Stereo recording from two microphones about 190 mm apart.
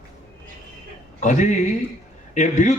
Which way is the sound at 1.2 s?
40° left (ahead or behind).